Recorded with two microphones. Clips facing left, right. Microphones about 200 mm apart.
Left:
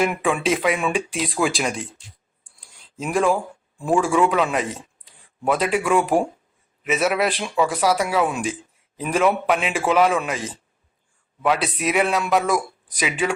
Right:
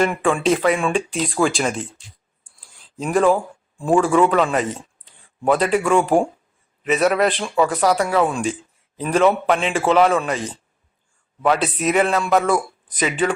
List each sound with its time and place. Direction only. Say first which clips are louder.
0.0 s a man's voice: right 3 dB; 5° left (ahead or behind)
2.6 s a sound: right 1 dB; centre (ahead or behind)
3.0 s speech: right 3 dB; centre (ahead or behind)
4.0 s speech: right 3 dB; 15° left (ahead or behind)
4.3 s a man's voice: right 3 dB; centre (ahead or behind)